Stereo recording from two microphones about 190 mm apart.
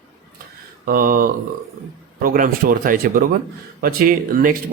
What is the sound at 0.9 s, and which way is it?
Speech, 50° right (ahead or behind).